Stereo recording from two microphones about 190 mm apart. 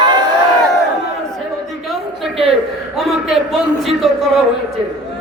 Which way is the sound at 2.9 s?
Centre (ahead or behind).